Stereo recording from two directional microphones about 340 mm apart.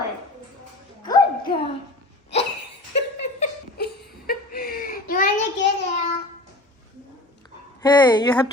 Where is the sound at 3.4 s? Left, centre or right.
Left.